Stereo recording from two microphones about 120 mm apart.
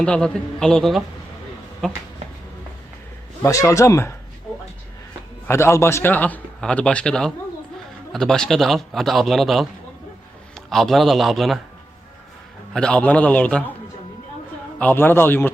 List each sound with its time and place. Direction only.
0.0 s a man's voice: 10° left (ahead or behind)
3.4 s speech: 25° left (ahead or behind)
5.5 s a man's voice: 20° left (ahead or behind); by 11.6 s centre (ahead or behind)
12.7 s a man's voice: 5° left (ahead or behind)
14.8 s a man's voice: 15° left (ahead or behind)